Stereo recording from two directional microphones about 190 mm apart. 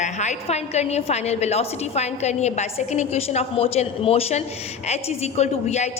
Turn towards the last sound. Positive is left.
turn(degrees=35)  # may be behind; listen again after turning